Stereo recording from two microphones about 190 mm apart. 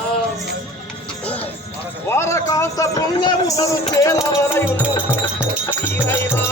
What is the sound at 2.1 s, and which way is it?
A man's voice, 15° left (ahead or behind).